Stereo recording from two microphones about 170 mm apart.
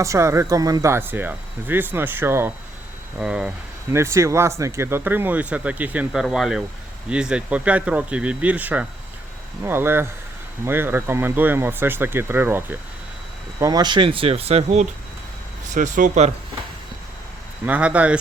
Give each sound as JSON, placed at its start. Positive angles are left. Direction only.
{"t": 0.0, "sound": "speech", "side_deg": -15}
{"t": 3.9, "sound": "speech", "side_deg": -15}
{"t": 13.6, "sound": "speech", "side_deg": -20}
{"t": 15.7, "sound": "speech", "side_deg": -50}
{"t": 17.7, "sound": "speech", "side_deg": -10}